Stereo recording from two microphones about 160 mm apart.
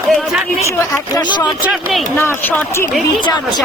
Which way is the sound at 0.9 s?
30° left (ahead or behind).